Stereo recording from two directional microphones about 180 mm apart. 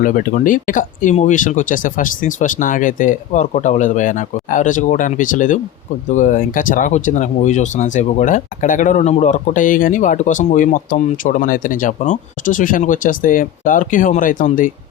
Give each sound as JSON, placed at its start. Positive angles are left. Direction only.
{"t": 0.0, "sound": "speech", "side_deg": 45}